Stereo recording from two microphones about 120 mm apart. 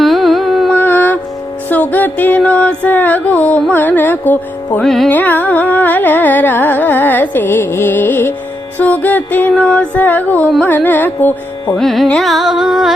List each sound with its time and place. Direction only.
0.0 s carnatic music: centre (ahead or behind)
0.7 s mantra: 15° left (ahead or behind)
1.7 s music: 15° left (ahead or behind)
5.0 s carnatic music: 15° left (ahead or behind)
11.8 s carnatic music: centre (ahead or behind)